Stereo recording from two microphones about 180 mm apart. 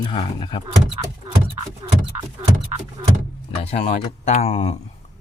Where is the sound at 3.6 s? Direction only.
35° left (ahead or behind).